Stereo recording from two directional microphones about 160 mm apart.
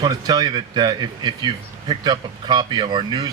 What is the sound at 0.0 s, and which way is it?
A man's voice, 25° right (ahead or behind).